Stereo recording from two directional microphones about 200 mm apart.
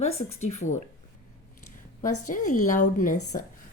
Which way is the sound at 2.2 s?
40° left (ahead or behind).